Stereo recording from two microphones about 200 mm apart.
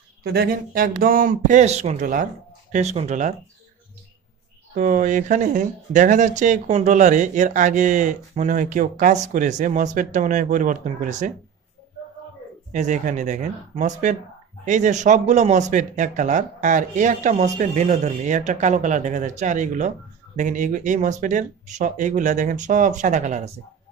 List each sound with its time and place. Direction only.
0.3 s speech: 45° right (ahead or behind)
4.7 s speech: 40° right (ahead or behind)
12.7 s speech: 35° right (ahead or behind)